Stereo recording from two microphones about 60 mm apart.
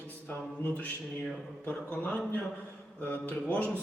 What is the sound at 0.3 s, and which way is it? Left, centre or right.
Speech, left.